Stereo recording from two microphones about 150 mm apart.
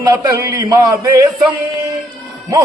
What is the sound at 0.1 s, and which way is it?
Speech, 20° right (ahead or behind).